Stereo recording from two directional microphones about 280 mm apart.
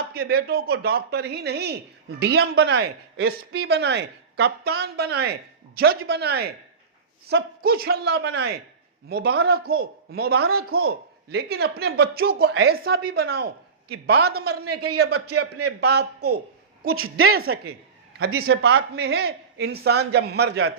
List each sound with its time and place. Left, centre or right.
0.1 s speech: right
14.6 s a man's voice: right
14.9 s speech: right
16.9 s a woman's voice: right
17.2 s speech: right